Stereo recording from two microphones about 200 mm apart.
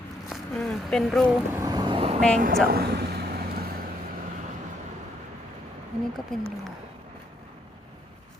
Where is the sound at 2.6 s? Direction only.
50° right (ahead or behind).